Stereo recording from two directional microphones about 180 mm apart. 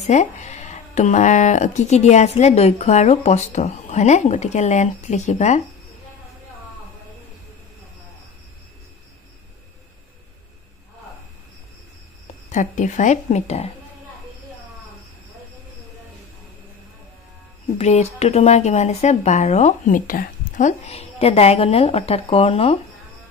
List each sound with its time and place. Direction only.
0.0 s speech: 40° left (ahead or behind)
12.4 s a woman's voice: 45° left (ahead or behind)
17.7 s speech: 35° left (ahead or behind)